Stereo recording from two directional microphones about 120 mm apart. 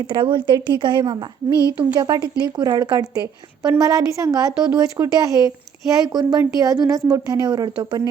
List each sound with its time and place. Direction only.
0.1 s a woman's voice: 45° right (ahead or behind)